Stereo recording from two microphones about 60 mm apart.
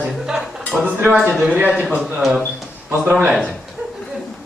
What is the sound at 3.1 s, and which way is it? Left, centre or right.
Speech, right.